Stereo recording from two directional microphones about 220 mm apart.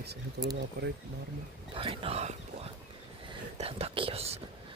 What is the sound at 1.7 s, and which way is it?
Speech, 25° right (ahead or behind).